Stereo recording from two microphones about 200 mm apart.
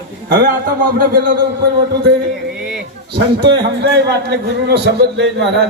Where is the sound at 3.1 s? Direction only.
25° right (ahead or behind).